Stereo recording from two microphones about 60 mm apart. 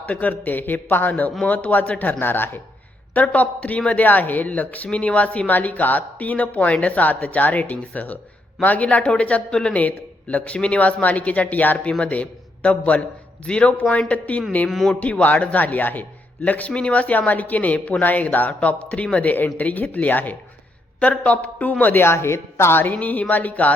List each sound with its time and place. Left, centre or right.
0.0 s speech: left